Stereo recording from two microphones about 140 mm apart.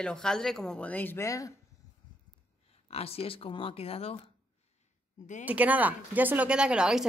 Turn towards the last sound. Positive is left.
turn(degrees=-5)  # may be behind; listen again after turning